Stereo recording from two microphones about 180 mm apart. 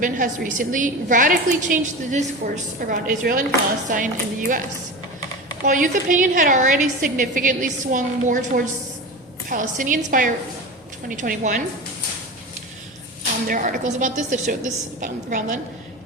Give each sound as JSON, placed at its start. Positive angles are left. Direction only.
{"t": 0.0, "sound": "a woman's voice", "side_deg": -45}
{"t": 5.6, "sound": "a woman's voice", "side_deg": -45}
{"t": 13.5, "sound": "a woman's voice", "side_deg": -45}